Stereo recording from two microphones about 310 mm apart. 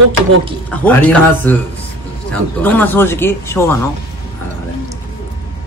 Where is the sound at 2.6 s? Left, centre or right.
Centre.